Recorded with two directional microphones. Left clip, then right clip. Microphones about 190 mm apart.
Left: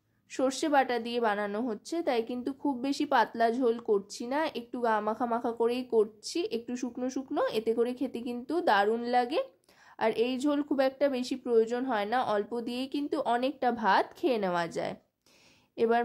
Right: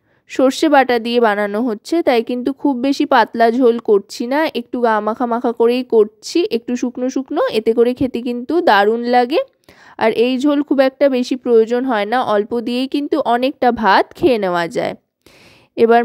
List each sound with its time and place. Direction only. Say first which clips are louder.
0.3 s a woman's voice: right 15 dB; 45° right (ahead or behind)